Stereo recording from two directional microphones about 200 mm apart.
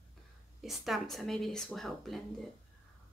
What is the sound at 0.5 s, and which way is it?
Speech, centre (ahead or behind).